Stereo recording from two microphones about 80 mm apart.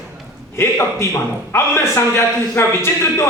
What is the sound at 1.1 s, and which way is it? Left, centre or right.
A man's voice, left.